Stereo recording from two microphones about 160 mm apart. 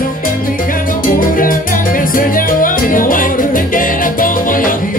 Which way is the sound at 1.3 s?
60° left (ahead or behind).